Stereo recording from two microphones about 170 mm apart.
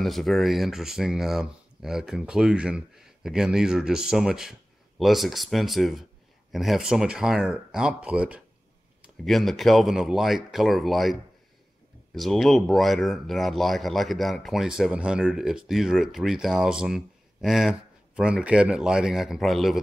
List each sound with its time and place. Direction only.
0.0 s speech: centre (ahead or behind)
12.2 s speech: centre (ahead or behind)